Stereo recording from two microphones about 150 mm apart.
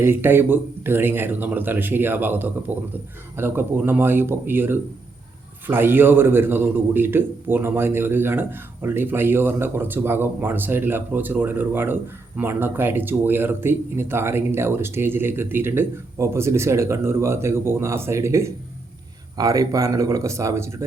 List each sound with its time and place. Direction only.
0.0 s a man's voice: 15° right (ahead or behind)